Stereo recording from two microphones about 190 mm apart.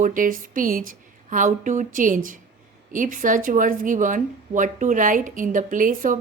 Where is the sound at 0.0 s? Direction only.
45° right (ahead or behind).